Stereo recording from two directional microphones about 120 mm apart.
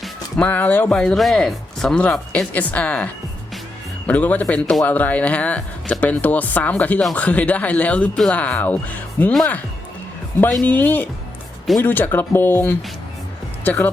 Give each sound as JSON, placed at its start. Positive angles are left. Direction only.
{"t": 0.0, "sound": "speech", "side_deg": 10}
{"t": 10.5, "sound": "speech", "side_deg": 10}